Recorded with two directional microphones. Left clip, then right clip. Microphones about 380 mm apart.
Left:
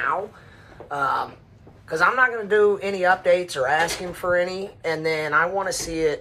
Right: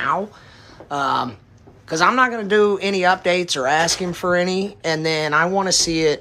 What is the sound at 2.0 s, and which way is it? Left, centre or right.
Speech, centre.